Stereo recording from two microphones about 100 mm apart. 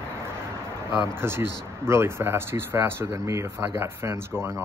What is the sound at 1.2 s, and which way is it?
Speech, 25° right (ahead or behind).